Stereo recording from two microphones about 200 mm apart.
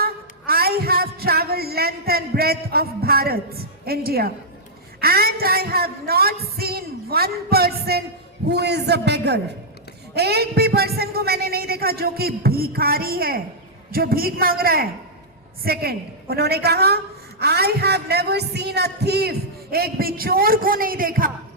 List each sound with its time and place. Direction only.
0.0 s music: 50° right (ahead or behind)
4.9 s a man's voice: 50° right (ahead or behind)